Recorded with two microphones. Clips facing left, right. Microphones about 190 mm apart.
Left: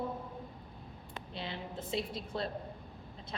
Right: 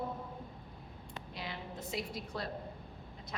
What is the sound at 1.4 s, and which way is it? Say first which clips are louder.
A woman's voice: left 3 dB; 30° left (ahead or behind).